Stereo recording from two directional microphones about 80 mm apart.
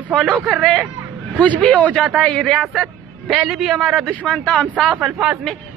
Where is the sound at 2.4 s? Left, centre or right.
Centre.